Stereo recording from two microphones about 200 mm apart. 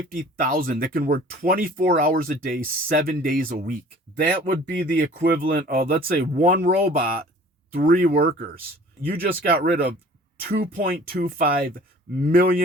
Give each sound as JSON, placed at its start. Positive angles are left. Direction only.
{"t": 0.0, "sound": "speech", "side_deg": -45}